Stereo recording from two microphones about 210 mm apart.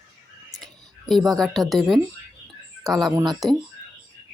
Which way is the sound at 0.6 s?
Centre (ahead or behind).